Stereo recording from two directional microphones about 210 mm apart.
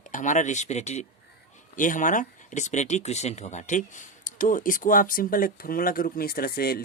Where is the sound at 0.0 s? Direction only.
35° left (ahead or behind).